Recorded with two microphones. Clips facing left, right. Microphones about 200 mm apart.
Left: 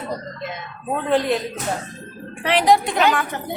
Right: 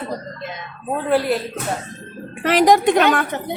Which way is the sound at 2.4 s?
40° right (ahead or behind).